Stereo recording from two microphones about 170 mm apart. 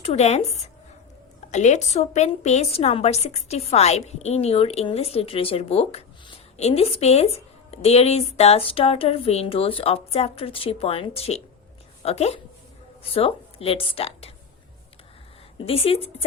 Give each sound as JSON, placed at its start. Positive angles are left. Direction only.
{"t": 0.0, "sound": "a woman's voice", "side_deg": 40}
{"t": 15.5, "sound": "a woman's voice", "side_deg": 35}